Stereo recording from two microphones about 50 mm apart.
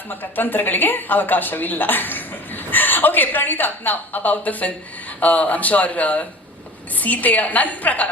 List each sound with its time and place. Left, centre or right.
0.1 s speech: left